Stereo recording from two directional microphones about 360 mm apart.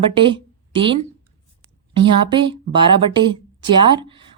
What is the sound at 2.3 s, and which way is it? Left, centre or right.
A woman's voice, centre.